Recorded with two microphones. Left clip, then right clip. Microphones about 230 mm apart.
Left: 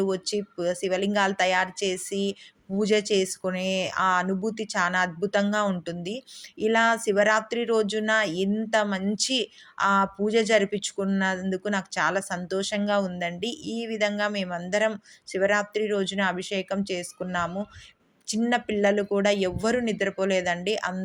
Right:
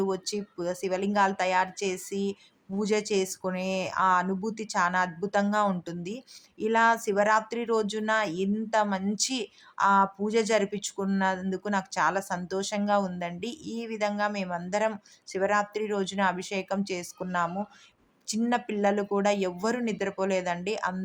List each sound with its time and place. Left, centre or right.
0.0 s speech: centre